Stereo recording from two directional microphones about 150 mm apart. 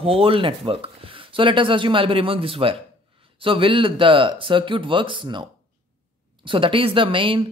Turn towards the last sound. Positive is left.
turn(degrees=-35)  # may be behind; listen again after turning